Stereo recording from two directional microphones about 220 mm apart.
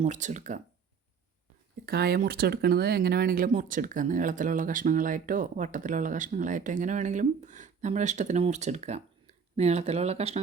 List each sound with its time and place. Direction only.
0.0 s speech: 35° right (ahead or behind)
1.9 s speech: 45° right (ahead or behind); by 10.4 s 30° right (ahead or behind)